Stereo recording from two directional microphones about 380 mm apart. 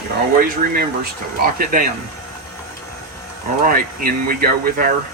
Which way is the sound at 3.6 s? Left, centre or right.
Right.